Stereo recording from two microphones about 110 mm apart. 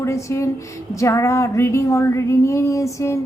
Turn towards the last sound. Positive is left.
turn(degrees=25)  # may be behind; listen again after turning